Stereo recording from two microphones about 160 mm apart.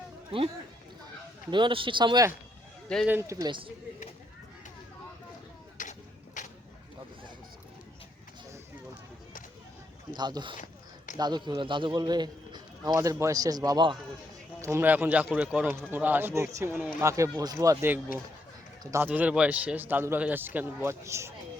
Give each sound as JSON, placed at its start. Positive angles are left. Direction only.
{"t": 0.3, "sound": "a man's voice", "side_deg": -35}
{"t": 3.1, "sound": "a man's voice", "side_deg": -15}
{"t": 5.7, "sound": "a sound", "side_deg": 55}
{"t": 10.1, "sound": "a man's voice", "side_deg": -25}
{"t": 10.6, "sound": "a sound", "side_deg": 50}
{"t": 11.2, "sound": "a man's voice", "side_deg": -25}